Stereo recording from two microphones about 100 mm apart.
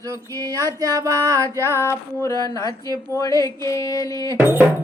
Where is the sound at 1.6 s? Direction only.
25° left (ahead or behind).